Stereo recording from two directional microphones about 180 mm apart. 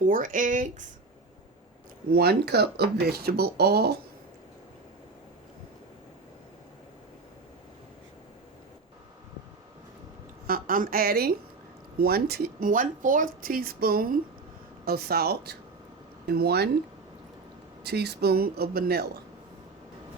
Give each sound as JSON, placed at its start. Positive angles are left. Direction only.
{"t": 0.0, "sound": "speech", "side_deg": -50}
{"t": 2.0, "sound": "speech", "side_deg": -60}
{"t": 10.4, "sound": "a woman's voice", "side_deg": -50}
{"t": 17.8, "sound": "speech", "side_deg": -65}